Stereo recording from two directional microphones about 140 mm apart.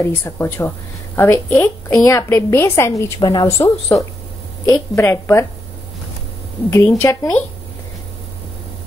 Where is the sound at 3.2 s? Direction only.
30° left (ahead or behind).